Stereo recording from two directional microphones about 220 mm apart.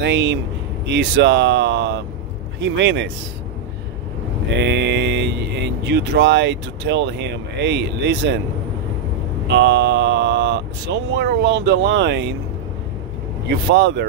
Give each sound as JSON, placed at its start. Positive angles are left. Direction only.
{"t": 0.0, "sound": "speech", "side_deg": -55}
{"t": 4.6, "sound": "a sound", "side_deg": -50}
{"t": 5.9, "sound": "speech", "side_deg": -50}
{"t": 9.5, "sound": "speech", "side_deg": -50}
{"t": 13.7, "sound": "speech", "side_deg": -55}